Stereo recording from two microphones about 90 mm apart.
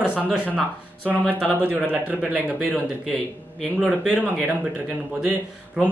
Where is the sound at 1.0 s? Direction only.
15° right (ahead or behind).